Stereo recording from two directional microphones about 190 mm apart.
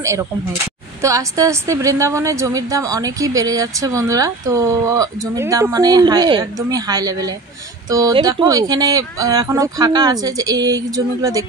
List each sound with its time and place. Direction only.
0.0 s a woman's voice: 15° right (ahead or behind)